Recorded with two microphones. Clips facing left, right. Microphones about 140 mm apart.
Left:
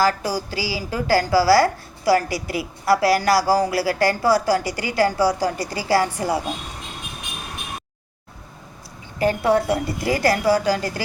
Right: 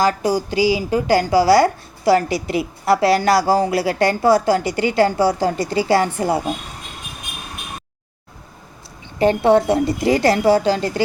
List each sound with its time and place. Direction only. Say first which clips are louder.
0.0 s a woman's voice: right 3 dB; 20° right (ahead or behind)
9.1 s a woman's voice: right 5 dB; 25° right (ahead or behind)